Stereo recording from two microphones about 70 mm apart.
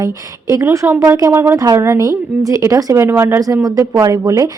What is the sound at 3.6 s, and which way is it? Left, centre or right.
Speech, right.